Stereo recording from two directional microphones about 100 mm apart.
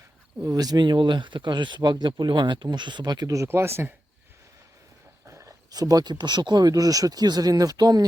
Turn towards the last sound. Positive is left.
turn(degrees=-40)  # may be behind; listen again after turning